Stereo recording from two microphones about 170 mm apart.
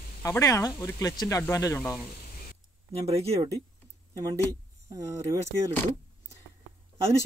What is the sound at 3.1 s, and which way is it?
Speech, 35° right (ahead or behind).